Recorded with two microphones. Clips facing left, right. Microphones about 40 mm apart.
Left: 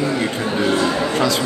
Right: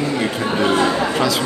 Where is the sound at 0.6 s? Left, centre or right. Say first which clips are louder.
Right 2 dB; centre.